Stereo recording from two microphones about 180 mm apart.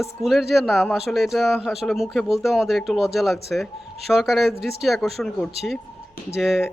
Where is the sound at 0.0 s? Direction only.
Centre (ahead or behind).